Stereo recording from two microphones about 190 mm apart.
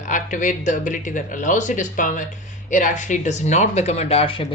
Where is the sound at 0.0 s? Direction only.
40° left (ahead or behind).